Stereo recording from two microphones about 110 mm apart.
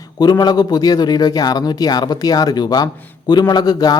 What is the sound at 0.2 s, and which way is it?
A man's voice, 40° left (ahead or behind).